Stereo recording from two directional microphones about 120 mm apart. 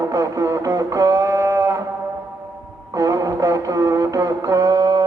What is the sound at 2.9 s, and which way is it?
Music, 30° right (ahead or behind).